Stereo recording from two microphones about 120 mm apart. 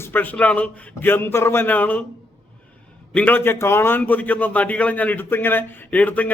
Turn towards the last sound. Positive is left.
turn(degrees=15)  # may be behind; listen again after turning